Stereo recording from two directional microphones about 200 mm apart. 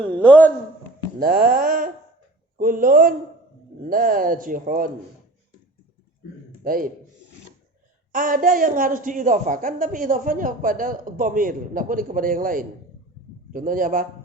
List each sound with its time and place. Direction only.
0.0 s a man's voice: 5° left (ahead or behind)
1.2 s a woman's voice: 45° right (ahead or behind)
6.7 s a woman's voice: 45° right (ahead or behind)
8.1 s a woman's voice: 45° right (ahead or behind)